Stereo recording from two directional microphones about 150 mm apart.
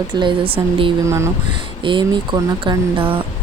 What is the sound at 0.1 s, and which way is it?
Speech, 30° right (ahead or behind).